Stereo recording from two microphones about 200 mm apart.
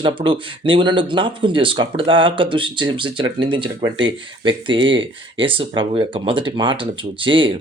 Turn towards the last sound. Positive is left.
turn(degrees=-25)  # may be behind; listen again after turning